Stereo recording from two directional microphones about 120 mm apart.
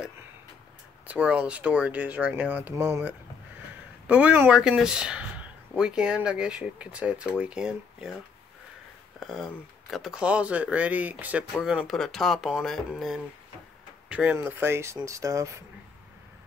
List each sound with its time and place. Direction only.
1.0 s speech: 10° right (ahead or behind)
9.2 s speech: centre (ahead or behind); by 15.6 s 25° right (ahead or behind)